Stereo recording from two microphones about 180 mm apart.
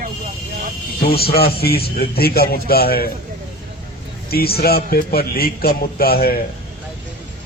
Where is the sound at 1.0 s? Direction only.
60° left (ahead or behind).